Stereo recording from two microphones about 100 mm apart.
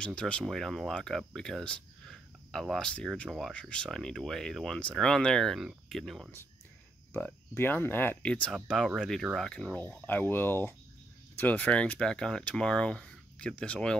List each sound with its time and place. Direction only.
0.0 s speech: 10° left (ahead or behind)
3.5 s speech: 10° left (ahead or behind)
7.2 s speech: 20° left (ahead or behind)
9.0 s speech: centre (ahead or behind)